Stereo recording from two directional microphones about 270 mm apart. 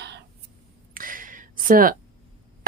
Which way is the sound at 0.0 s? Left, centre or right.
Right.